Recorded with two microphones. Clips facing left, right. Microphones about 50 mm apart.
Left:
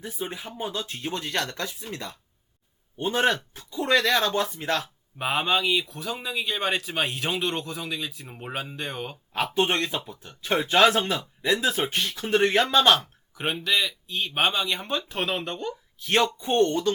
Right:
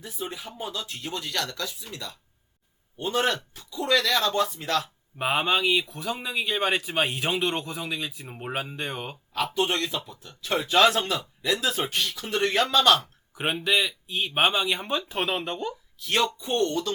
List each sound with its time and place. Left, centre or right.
0.0 s speech: left
5.1 s speech: centre
9.6 s speech: left
13.3 s speech: centre
16.0 s speech: left